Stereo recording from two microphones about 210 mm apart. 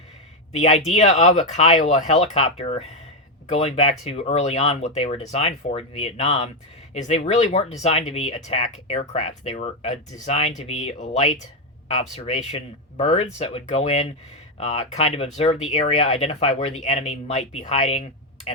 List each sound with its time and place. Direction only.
0.5 s speech: 35° left (ahead or behind)